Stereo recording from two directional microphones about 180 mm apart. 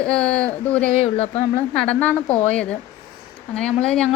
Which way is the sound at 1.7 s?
5° left (ahead or behind).